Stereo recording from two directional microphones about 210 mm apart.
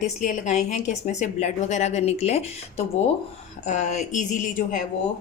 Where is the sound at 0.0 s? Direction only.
35° left (ahead or behind).